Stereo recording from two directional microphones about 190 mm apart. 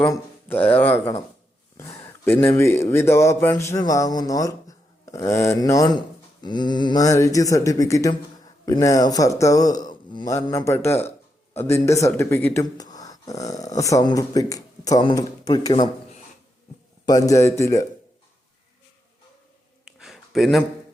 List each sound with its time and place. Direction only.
0.1 s speech: 10° left (ahead or behind)
17.1 s speech: 20° left (ahead or behind)
20.0 s a sound: centre (ahead or behind)